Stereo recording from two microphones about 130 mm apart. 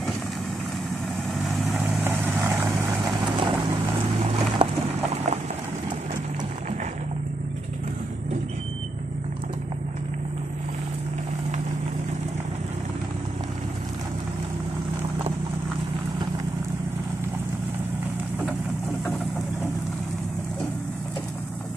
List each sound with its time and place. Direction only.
1.4 s vehicle: centre (ahead or behind)
2.0 s vehicle: 15° right (ahead or behind)
3.2 s vehicle: 35° right (ahead or behind)
4.6 s clip-clop: 40° right (ahead or behind)